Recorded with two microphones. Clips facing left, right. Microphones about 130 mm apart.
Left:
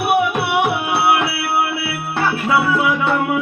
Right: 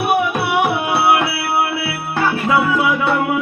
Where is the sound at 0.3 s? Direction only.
15° left (ahead or behind).